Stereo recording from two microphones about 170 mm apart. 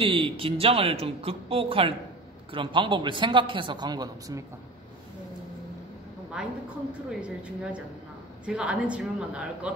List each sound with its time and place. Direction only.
0.0 s a man's voice: 30° right (ahead or behind)
6.4 s a woman's voice: 5° right (ahead or behind)